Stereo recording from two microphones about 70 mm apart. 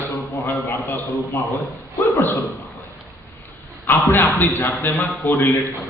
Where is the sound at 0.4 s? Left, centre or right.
Left.